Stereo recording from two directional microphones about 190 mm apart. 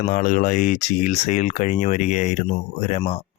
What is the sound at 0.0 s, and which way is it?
Speech, 40° left (ahead or behind).